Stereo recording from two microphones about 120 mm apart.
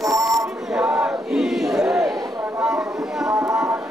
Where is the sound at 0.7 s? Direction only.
10° right (ahead or behind).